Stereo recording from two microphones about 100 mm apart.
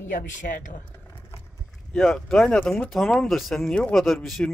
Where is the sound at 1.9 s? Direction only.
5° left (ahead or behind).